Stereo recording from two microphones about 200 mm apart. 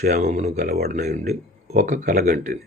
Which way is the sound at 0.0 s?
50° right (ahead or behind).